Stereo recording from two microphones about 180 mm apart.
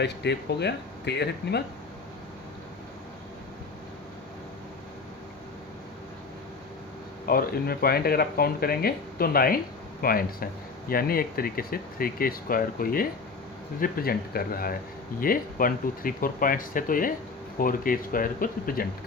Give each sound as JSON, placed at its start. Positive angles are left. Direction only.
{"t": 0.0, "sound": "speech", "side_deg": 70}
{"t": 7.3, "sound": "speech", "side_deg": 55}